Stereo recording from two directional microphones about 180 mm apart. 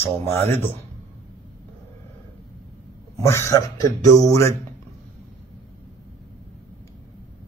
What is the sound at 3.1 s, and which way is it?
Speech, 15° left (ahead or behind).